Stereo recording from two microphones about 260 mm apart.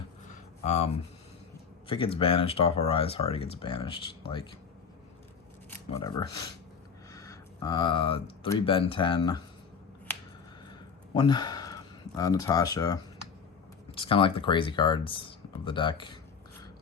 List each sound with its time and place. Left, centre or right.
0.6 s speech: left
1.9 s speech: centre
5.9 s speech: centre
10.1 s finger snapping: centre
10.7 s a sound: centre
13.9 s speech: left